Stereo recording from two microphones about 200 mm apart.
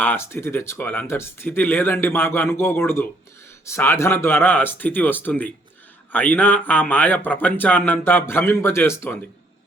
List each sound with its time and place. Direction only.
0.0 s speech: 10° left (ahead or behind)